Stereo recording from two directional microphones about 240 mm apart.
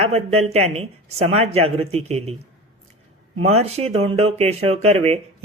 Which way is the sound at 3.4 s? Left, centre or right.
Right.